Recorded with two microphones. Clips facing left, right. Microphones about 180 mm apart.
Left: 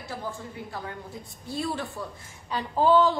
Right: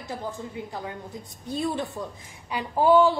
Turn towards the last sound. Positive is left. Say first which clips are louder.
# right 2 dB
turn(degrees=-10)  # may be behind; listen again after turning